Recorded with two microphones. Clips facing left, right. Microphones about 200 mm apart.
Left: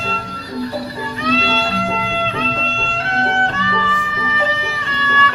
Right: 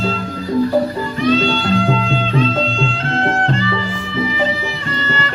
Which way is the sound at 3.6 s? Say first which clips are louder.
Right 2 dB; 30° right (ahead or behind).